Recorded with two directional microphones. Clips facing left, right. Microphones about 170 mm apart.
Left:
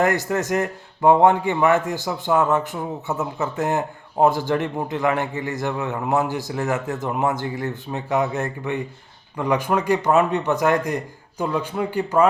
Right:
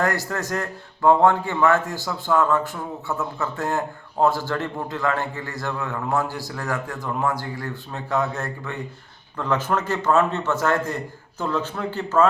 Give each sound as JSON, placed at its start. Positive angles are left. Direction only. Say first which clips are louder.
{"t": 0.0, "sound": "a man's voice", "louder": "left 4 dB", "side_deg": 20}